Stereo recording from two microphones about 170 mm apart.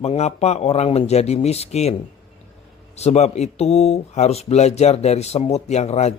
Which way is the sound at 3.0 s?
40° left (ahead or behind).